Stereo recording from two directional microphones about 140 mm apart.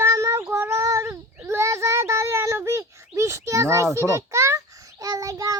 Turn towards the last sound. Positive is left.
turn(degrees=-25)  # may be behind; listen again after turning